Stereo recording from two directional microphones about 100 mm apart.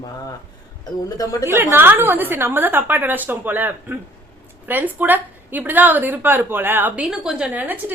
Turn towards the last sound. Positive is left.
turn(degrees=-15)  # may be behind; listen again after turning